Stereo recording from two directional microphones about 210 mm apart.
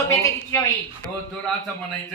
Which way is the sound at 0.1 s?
15° left (ahead or behind).